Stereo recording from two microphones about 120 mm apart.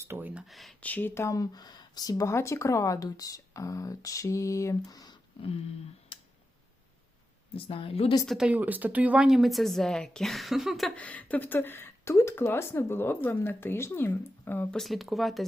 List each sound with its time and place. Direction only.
0.0 s speech: 20° right (ahead or behind)
0.4 s speech: centre (ahead or behind)
0.8 s speech: 15° left (ahead or behind); by 5.1 s 30° left (ahead or behind)
6.1 s a sound: 45° left (ahead or behind)
7.5 s a woman's voice: 50° left (ahead or behind)
8.3 s a woman's voice: 10° right (ahead or behind); by 14.8 s 15° left (ahead or behind)
14.8 s speech: centre (ahead or behind)